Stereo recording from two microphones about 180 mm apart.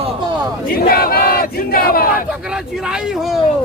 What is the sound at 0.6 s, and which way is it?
Battle cry, 55° left (ahead or behind).